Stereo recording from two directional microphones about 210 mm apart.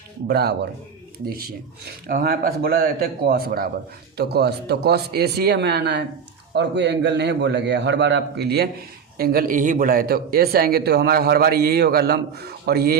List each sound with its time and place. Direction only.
0.3 s a man's voice: 50° right (ahead or behind)